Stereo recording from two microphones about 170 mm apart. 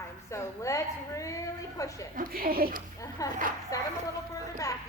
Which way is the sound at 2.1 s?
60° right (ahead or behind).